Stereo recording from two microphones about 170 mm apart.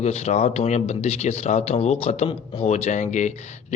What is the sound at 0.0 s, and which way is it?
Speech, 40° left (ahead or behind).